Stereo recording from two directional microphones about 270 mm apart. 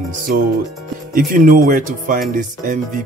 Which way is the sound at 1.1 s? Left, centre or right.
Right.